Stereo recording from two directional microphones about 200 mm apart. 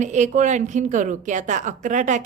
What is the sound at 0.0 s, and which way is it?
A woman's voice, 35° right (ahead or behind).